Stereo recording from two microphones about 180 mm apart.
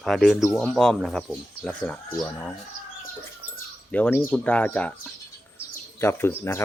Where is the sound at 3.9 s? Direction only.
10° left (ahead or behind).